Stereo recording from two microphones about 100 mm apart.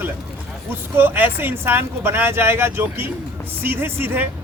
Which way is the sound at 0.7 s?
20° right (ahead or behind).